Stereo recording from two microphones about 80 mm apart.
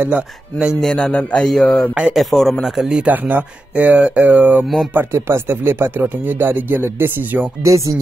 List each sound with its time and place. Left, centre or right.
0.0 s speech: centre
0.7 s a man's voice: centre
3.1 s speech: right
4.9 s speech: right
7.6 s speech: right